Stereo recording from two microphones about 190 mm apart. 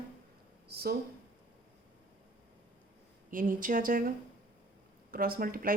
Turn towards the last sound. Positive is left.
turn(degrees=-50)  # may be behind; listen again after turning